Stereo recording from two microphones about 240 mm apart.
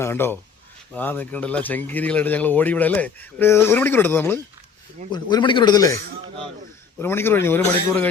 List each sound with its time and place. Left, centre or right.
0.0 s speech: centre
5.1 s speech: centre
7.0 s speech: centre